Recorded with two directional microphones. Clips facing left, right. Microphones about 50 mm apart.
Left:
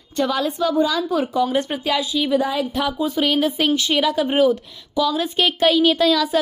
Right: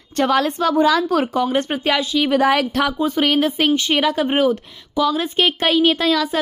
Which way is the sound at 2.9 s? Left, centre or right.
Right.